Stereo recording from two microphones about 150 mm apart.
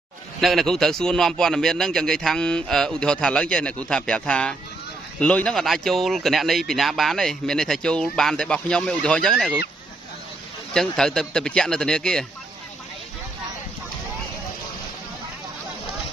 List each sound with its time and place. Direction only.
0.4 s speech: centre (ahead or behind)
10.7 s speech: 5° left (ahead or behind)